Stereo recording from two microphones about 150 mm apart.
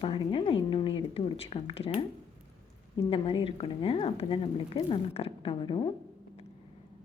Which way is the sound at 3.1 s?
40° left (ahead or behind).